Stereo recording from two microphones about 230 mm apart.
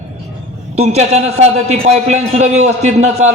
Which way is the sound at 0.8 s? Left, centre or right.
Right.